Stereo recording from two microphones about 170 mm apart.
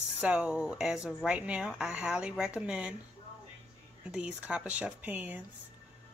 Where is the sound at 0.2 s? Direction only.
5° right (ahead or behind).